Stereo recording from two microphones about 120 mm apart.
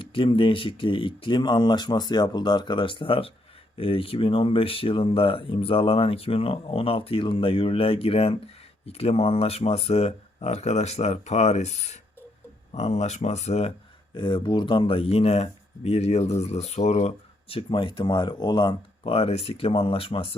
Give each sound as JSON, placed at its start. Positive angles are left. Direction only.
{"t": 0.0, "sound": "speech", "side_deg": 45}
{"t": 14.1, "sound": "speech", "side_deg": 40}
{"t": 17.5, "sound": "speech", "side_deg": 50}